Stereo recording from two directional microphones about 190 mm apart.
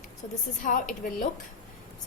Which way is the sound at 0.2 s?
40° left (ahead or behind).